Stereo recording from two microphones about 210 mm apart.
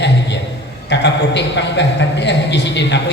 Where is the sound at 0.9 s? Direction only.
55° left (ahead or behind).